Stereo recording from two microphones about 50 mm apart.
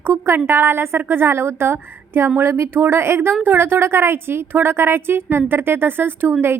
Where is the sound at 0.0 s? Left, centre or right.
Right.